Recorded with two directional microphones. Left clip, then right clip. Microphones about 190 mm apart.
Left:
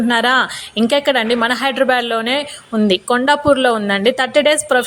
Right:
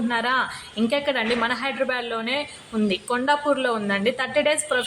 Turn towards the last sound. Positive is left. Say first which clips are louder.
# left 8 dB
turn(degrees=40)  # may be behind; listen again after turning